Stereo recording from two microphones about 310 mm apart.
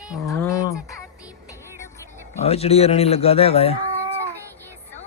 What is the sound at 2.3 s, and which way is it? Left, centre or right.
Speech, centre.